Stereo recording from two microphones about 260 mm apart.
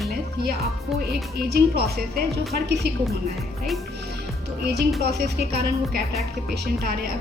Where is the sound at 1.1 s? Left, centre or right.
Right.